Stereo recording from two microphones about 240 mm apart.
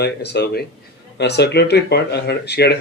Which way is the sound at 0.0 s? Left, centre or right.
Left.